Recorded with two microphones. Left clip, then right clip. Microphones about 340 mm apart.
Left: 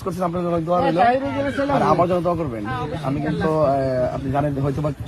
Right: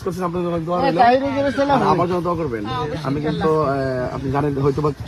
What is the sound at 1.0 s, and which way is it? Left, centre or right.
Speech, right.